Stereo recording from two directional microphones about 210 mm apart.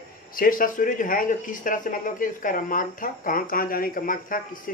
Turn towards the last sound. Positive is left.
turn(degrees=40)  # may be behind; listen again after turning